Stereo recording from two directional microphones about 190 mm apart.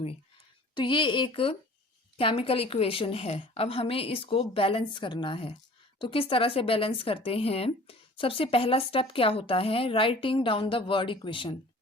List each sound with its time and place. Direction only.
0.7 s speech: 25° left (ahead or behind)